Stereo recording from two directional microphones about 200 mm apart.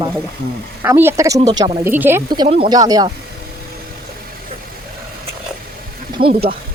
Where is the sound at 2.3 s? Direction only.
25° right (ahead or behind).